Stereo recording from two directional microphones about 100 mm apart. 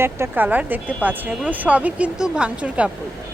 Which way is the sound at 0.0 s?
20° right (ahead or behind).